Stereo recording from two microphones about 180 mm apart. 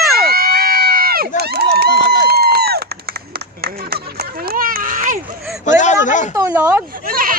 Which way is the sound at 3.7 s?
60° right (ahead or behind).